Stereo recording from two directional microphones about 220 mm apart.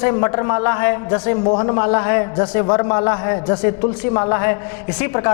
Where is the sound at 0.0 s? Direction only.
20° left (ahead or behind).